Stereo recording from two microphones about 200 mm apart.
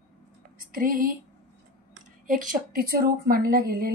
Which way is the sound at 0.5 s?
45° right (ahead or behind).